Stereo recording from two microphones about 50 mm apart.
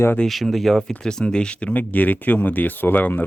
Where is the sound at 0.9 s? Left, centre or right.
Centre; by 3.3 s left.